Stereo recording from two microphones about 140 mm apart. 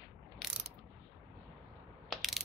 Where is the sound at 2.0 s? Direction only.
Centre (ahead or behind).